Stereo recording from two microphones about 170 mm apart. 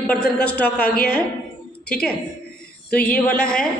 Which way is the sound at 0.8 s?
65° left (ahead or behind).